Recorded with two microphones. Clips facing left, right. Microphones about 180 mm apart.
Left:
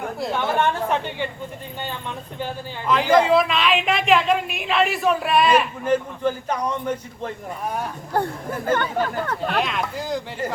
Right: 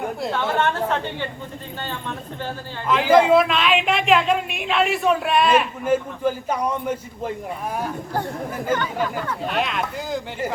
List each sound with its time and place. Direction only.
0.2 s speech: centre (ahead or behind)
0.6 s a woman's voice: 15° left (ahead or behind)
2.8 s speech: centre (ahead or behind)
8.6 s speech: 55° left (ahead or behind)
9.4 s speech: centre (ahead or behind)